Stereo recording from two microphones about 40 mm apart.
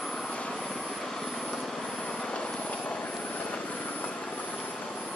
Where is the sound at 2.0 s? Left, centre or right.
Left.